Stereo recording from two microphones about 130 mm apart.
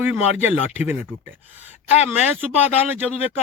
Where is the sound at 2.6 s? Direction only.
55° left (ahead or behind).